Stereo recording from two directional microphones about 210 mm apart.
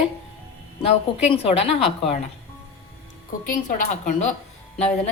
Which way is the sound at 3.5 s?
40° left (ahead or behind).